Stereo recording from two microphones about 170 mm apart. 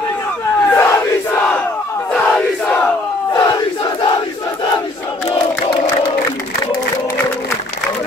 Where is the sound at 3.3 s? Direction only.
25° left (ahead or behind).